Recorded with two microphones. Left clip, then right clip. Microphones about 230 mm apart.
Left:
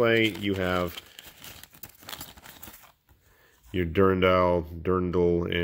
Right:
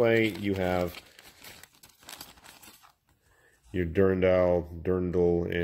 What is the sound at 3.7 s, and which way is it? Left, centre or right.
Speech, centre.